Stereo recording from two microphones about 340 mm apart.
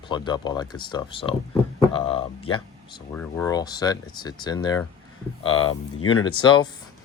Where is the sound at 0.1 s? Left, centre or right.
Centre.